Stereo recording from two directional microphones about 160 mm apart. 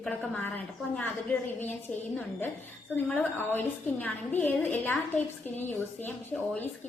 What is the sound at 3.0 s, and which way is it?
A woman's voice, 10° left (ahead or behind).